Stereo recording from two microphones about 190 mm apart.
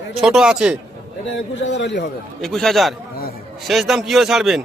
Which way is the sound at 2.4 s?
Centre (ahead or behind).